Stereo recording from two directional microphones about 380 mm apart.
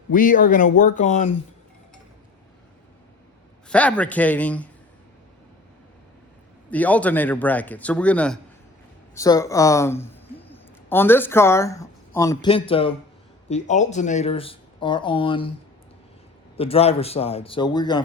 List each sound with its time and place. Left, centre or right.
0.1 s speech: left
3.7 s a man's voice: centre
6.7 s a man's voice: centre
16.6 s speech: centre